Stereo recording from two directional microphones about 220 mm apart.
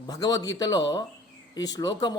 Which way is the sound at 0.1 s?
15° left (ahead or behind).